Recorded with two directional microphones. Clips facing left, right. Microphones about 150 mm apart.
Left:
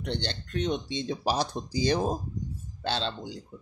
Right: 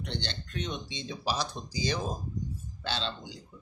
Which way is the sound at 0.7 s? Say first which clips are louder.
Left 8 dB; 55° left (ahead or behind).